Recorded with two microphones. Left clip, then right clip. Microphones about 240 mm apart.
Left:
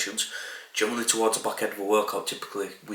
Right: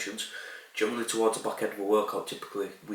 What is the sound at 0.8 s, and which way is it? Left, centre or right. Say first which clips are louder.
Speech: left 3 dB; centre.